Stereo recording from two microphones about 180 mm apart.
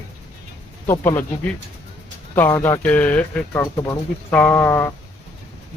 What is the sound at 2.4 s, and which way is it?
Speech, 15° left (ahead or behind).